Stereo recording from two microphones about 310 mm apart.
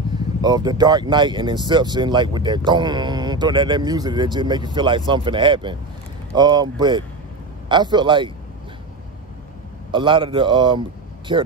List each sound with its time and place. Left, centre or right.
0.4 s speech: centre
9.8 s speech: centre